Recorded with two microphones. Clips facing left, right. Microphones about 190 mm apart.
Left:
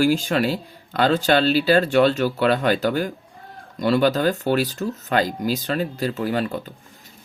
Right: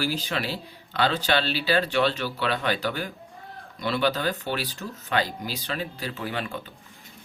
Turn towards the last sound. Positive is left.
turn(degrees=40)  # may be behind; listen again after turning